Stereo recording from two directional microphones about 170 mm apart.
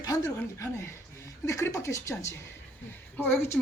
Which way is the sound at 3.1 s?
5° left (ahead or behind).